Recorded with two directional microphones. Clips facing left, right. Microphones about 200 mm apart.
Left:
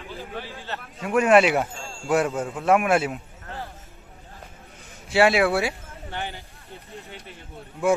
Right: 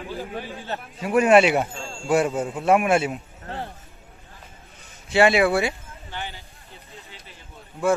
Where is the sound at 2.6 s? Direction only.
Centre (ahead or behind).